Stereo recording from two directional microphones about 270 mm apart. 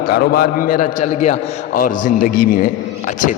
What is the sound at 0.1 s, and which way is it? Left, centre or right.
A man's voice, left.